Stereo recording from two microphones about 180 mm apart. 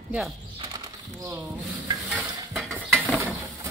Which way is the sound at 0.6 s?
20° right (ahead or behind).